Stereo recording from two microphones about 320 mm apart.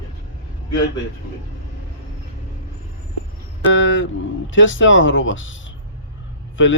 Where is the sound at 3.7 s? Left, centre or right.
Left.